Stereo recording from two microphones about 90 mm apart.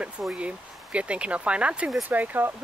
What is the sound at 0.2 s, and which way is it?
Speech, 10° right (ahead or behind).